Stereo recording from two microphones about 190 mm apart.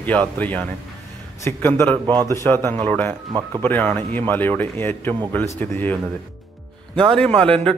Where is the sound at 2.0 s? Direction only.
20° right (ahead or behind).